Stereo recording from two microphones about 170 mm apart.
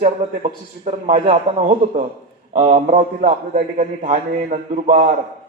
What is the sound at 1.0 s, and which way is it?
A man's voice, 40° right (ahead or behind).